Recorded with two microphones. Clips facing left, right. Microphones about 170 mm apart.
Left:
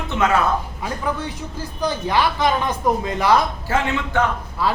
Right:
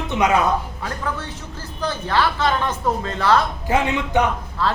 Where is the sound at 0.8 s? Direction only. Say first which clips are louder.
Left 3 dB; 15° left (ahead or behind).